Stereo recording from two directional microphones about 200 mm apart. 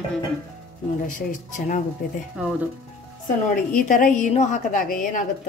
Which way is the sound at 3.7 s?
45° left (ahead or behind).